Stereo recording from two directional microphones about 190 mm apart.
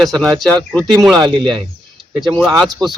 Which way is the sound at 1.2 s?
25° right (ahead or behind).